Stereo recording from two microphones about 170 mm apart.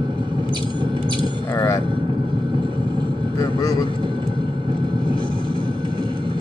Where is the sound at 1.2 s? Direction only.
20° left (ahead or behind).